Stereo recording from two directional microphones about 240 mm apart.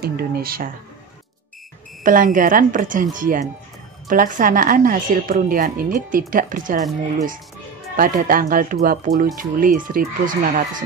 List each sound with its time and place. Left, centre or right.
0.0 s a woman's voice: right
2.0 s a woman's voice: right
7.9 s a woman's voice: right